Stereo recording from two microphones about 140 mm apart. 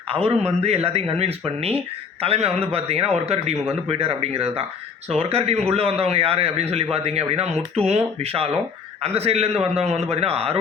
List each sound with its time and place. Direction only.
0.1 s a man's voice: 45° right (ahead or behind)